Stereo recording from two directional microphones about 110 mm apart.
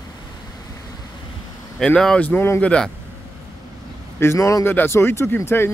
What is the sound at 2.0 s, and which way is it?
Speech, 5° left (ahead or behind).